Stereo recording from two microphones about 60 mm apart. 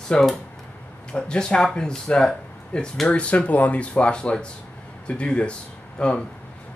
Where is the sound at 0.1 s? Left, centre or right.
Centre.